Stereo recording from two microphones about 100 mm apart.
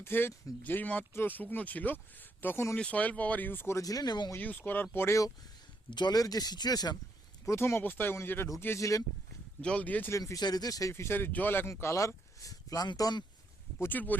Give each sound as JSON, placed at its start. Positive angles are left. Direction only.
{"t": 0.0, "sound": "speech", "side_deg": 25}
{"t": 4.4, "sound": "speech", "side_deg": 15}
{"t": 5.9, "sound": "speech", "side_deg": 45}
{"t": 7.4, "sound": "speech", "side_deg": 25}
{"t": 9.6, "sound": "speech", "side_deg": 10}
{"t": 10.1, "sound": "speech", "side_deg": 30}
{"t": 13.7, "sound": "speech", "side_deg": 20}